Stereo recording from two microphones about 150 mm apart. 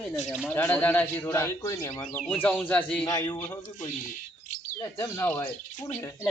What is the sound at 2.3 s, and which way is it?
Speech, 10° left (ahead or behind).